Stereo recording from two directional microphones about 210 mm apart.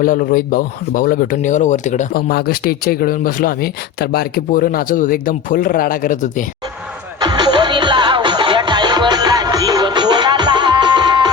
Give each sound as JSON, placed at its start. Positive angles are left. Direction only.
{"t": 0.0, "sound": "speech", "side_deg": 40}
{"t": 7.2, "sound": "music", "side_deg": -20}